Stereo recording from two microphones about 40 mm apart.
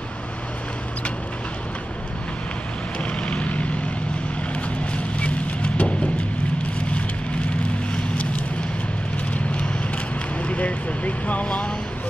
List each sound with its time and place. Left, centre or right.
3.3 s vehicle: left
4.9 s vehicle: left
7.9 s vehicle: left
9.3 s clip-clop: left
10.4 s vehicle: left